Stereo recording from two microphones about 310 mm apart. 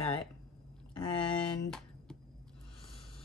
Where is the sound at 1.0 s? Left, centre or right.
Centre.